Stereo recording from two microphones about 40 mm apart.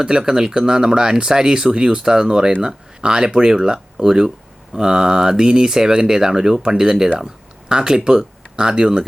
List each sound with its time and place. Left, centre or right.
0.0 s speech: centre